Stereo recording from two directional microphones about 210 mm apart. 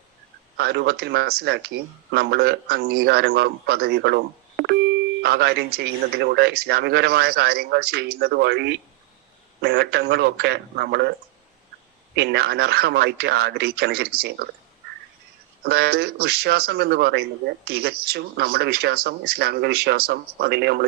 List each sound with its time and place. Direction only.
0.5 s speech: 50° right (ahead or behind)
12.1 s speech: 50° right (ahead or behind)
15.6 s speech: 50° right (ahead or behind)